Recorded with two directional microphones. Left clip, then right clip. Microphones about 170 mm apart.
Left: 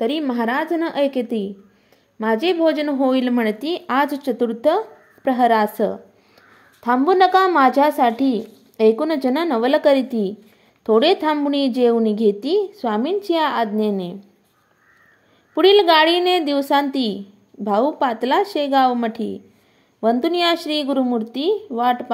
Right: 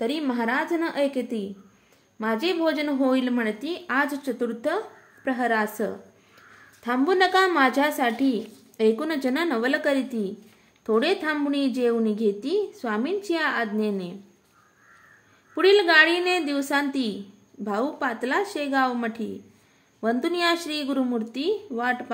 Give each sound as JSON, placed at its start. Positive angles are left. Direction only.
{"t": 0.0, "sound": "a woman's voice", "side_deg": 30}
{"t": 15.5, "sound": "a woman's voice", "side_deg": 30}
{"t": 21.7, "sound": "speech", "side_deg": 10}